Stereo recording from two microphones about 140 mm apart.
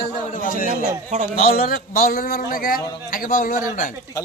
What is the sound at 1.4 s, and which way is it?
A man's voice, 90° left.